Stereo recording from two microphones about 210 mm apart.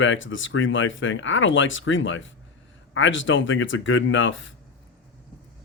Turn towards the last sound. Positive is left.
turn(degrees=65)  # may be behind; listen again after turning